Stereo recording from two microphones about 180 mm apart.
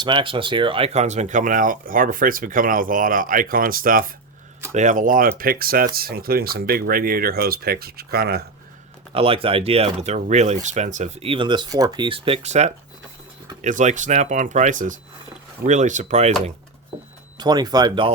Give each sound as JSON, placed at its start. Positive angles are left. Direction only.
{"t": 0.0, "sound": "speech", "side_deg": -25}
{"t": 9.1, "sound": "speech", "side_deg": -30}
{"t": 17.3, "sound": "speech", "side_deg": -25}